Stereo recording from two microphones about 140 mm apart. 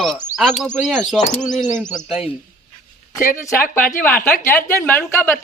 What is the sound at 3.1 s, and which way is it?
A woman's voice, 20° left (ahead or behind).